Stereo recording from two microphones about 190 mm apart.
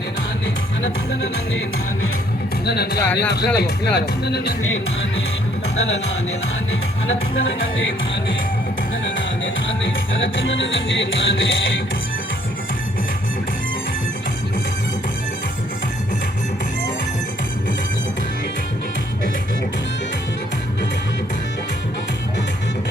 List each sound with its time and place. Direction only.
0.8 s music: 75° left (ahead or behind)
2.6 s speech: 60° left (ahead or behind); by 5.2 s 75° left (ahead or behind)
7.1 s speech: 90° left
9.6 s music: 85° left